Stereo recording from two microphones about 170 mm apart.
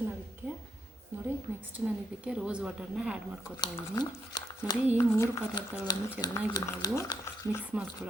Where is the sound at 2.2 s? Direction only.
5° right (ahead or behind).